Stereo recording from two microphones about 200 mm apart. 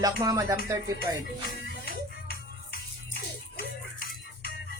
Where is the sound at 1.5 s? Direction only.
50° left (ahead or behind).